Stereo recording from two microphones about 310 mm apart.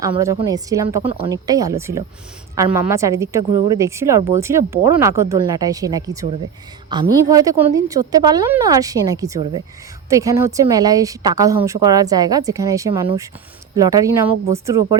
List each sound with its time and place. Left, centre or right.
0.0 s a woman's voice: centre